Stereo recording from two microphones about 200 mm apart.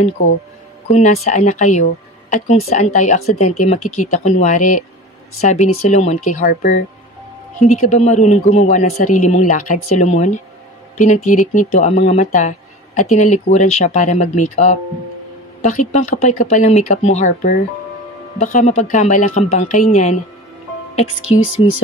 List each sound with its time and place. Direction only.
0.2 s speech: 40° left (ahead or behind)
21.3 s speech: 30° left (ahead or behind)